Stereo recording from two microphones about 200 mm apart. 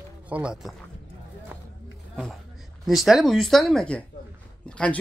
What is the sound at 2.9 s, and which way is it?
Speech, centre (ahead or behind).